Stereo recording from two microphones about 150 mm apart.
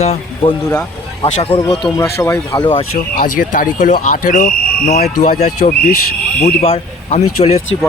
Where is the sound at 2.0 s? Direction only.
20° left (ahead or behind).